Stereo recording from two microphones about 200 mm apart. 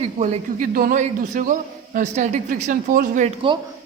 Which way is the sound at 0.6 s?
45° right (ahead or behind).